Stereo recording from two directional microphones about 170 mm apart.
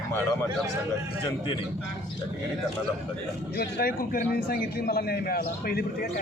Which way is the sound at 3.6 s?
65° left (ahead or behind).